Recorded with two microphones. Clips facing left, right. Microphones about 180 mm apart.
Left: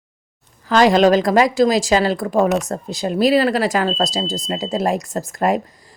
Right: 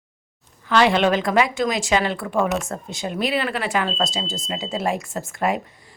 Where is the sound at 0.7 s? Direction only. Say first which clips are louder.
Left 5 dB; 40° left (ahead or behind).